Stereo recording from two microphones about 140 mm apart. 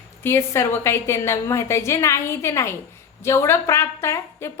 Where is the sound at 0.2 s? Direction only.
15° left (ahead or behind).